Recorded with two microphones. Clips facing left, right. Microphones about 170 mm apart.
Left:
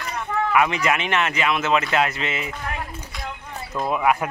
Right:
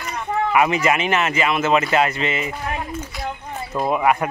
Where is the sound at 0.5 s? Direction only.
5° right (ahead or behind).